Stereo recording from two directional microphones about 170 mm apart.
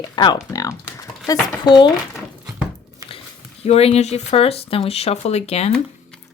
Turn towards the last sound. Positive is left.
turn(degrees=40)  # may be behind; listen again after turning